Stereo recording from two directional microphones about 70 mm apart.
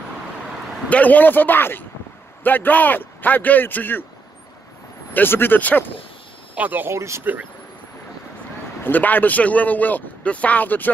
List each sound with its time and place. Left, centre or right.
0.8 s speech: left
5.1 s speech: left
6.5 s speech: right
6.9 s speech: right
8.8 s speech: left